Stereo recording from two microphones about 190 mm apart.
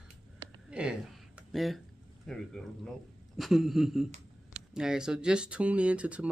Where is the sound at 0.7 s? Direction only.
5° right (ahead or behind).